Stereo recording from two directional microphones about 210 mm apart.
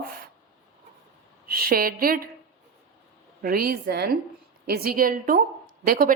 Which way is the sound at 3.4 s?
45° right (ahead or behind).